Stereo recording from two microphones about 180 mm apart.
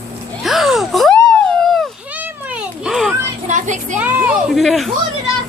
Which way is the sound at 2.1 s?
10° right (ahead or behind).